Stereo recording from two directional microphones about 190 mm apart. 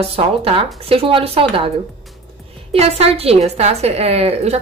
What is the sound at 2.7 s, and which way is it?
A woman's voice, 30° right (ahead or behind).